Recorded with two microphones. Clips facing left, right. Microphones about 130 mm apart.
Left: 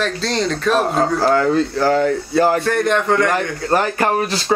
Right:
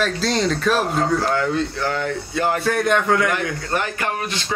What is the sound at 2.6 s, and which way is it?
Speech, centre (ahead or behind).